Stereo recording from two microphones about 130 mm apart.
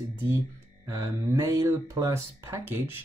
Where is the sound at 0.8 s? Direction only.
20° right (ahead or behind).